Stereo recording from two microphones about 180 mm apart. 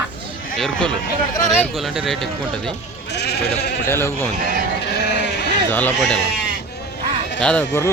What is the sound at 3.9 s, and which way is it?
Speech, 15° left (ahead or behind).